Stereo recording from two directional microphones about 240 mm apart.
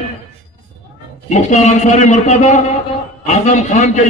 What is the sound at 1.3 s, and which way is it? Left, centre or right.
A man's voice, left.